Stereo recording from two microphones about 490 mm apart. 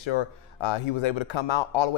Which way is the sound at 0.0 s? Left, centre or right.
Left.